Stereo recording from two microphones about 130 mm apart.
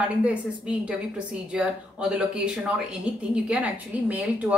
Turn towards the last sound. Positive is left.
turn(degrees=-10)  # may be behind; listen again after turning